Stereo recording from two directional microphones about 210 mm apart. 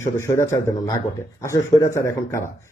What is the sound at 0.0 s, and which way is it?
Speech, 10° left (ahead or behind).